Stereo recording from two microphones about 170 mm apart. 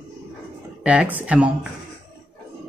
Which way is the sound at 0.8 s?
5° right (ahead or behind).